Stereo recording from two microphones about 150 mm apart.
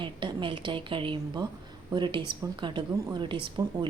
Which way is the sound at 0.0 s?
35° right (ahead or behind).